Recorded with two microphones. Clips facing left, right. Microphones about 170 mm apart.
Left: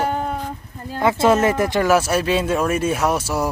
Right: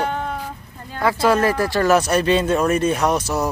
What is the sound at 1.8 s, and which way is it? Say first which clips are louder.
Speech: right 3 dB; 5° left (ahead or behind).